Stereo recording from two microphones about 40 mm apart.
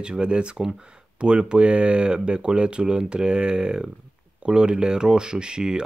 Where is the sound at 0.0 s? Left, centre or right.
Right.